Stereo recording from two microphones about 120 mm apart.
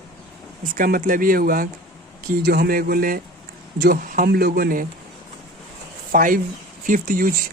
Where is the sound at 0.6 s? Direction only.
90° right.